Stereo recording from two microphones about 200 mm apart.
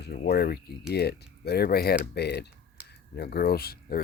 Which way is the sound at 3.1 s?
55° left (ahead or behind).